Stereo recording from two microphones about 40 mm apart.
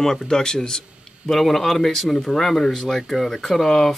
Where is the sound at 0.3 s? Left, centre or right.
Centre.